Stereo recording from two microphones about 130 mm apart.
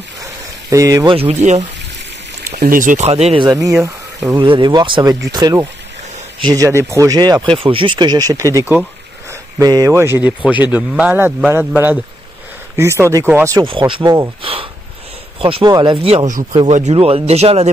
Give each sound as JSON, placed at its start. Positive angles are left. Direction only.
{"t": 0.7, "sound": "speech", "side_deg": -25}
{"t": 1.1, "sound": "speech", "side_deg": -55}
{"t": 2.5, "sound": "speech", "side_deg": -90}
{"t": 3.1, "sound": "speech", "side_deg": -50}
{"t": 3.4, "sound": "speech", "side_deg": -30}
{"t": 3.8, "sound": "a sound", "side_deg": -25}
{"t": 4.4, "sound": "speech", "side_deg": -40}
{"t": 7.5, "sound": "speech", "side_deg": -45}
{"t": 13.7, "sound": "speech", "side_deg": -40}
{"t": 14.4, "sound": "sniff", "side_deg": -45}
{"t": 15.4, "sound": "speech", "side_deg": -40}